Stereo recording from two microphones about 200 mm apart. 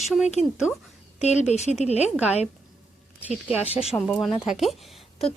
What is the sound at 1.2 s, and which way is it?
Speech, 35° left (ahead or behind).